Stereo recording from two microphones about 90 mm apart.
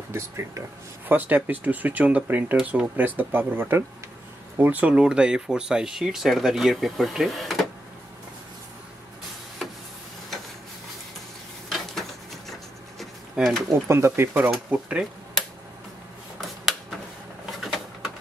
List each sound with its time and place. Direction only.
0.1 s speech: 35° right (ahead or behind)
1.0 s speech: 20° right (ahead or behind); by 7.6 s centre (ahead or behind)
11.7 s dishes: centre (ahead or behind)
13.0 s a sound: centre (ahead or behind)
13.8 s speech: 30° right (ahead or behind)
14.7 s speech: 15° right (ahead or behind)
17.5 s a sound: centre (ahead or behind)